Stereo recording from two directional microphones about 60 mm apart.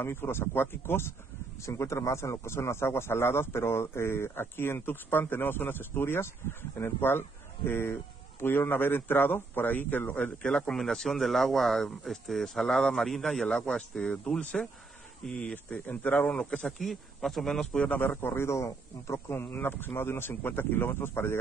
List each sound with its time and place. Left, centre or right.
0.0 s speech: left
1.6 s a man's voice: left; by 10.7 s centre
10.7 s speech: centre
13.7 s speech: centre
15.5 s a man's voice: left; by 17.6 s centre
17.7 s speech: left
19.1 s speech: left